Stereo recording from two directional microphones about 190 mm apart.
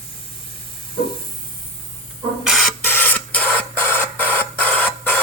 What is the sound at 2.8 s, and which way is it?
Printer, 10° left (ahead or behind).